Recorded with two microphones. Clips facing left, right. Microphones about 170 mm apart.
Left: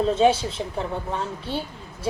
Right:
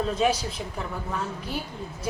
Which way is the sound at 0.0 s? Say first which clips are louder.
Left 5 dB; 30° left (ahead or behind).